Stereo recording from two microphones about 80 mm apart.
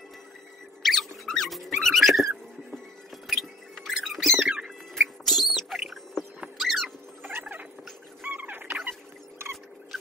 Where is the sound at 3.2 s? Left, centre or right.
Centre.